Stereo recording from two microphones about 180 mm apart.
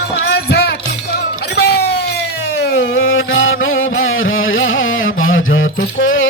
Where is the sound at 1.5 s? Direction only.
65° left (ahead or behind).